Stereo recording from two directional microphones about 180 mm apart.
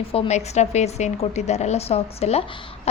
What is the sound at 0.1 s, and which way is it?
A woman's voice, 35° left (ahead or behind).